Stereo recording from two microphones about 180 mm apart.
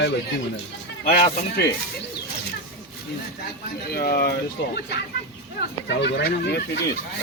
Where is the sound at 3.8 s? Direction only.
55° left (ahead or behind).